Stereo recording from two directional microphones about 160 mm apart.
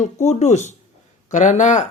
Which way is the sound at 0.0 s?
45° left (ahead or behind).